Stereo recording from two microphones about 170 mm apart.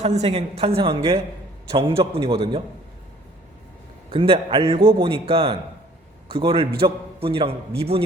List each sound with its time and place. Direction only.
0.0 s a man's voice: 40° right (ahead or behind)
4.1 s a man's voice: 35° right (ahead or behind)